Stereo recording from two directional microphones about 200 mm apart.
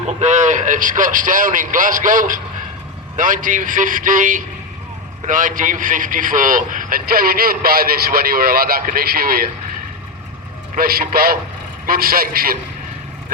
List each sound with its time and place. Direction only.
0.2 s a man's voice: 35° right (ahead or behind)
10.8 s a man's voice: 50° right (ahead or behind)